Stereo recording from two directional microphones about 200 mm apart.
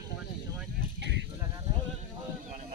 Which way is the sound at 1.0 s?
60° right (ahead or behind).